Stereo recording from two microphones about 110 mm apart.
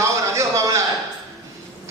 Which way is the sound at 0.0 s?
25° right (ahead or behind).